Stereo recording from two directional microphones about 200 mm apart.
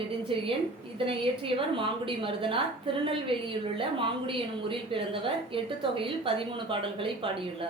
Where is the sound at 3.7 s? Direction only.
25° right (ahead or behind).